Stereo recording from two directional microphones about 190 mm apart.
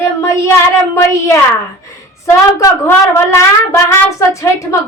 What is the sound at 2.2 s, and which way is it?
A woman's voice, 15° left (ahead or behind).